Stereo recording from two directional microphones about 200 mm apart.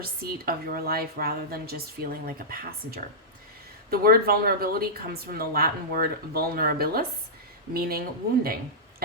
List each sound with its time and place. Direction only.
0.0 s speech: 50° right (ahead or behind)